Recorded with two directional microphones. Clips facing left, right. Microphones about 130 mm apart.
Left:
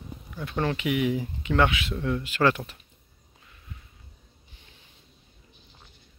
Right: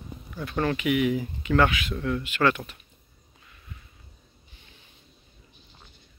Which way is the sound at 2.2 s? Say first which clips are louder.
Left 1 dB; 35° left (ahead or behind).